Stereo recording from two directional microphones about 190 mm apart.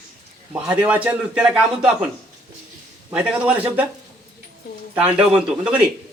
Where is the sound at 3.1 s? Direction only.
5° right (ahead or behind).